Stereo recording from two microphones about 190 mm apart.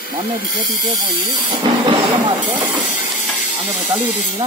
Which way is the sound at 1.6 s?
25° right (ahead or behind).